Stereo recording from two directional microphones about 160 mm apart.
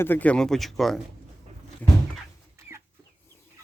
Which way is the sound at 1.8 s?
10° left (ahead or behind).